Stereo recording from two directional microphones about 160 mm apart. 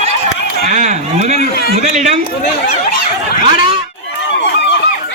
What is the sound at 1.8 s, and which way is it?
Speech, 50° right (ahead or behind).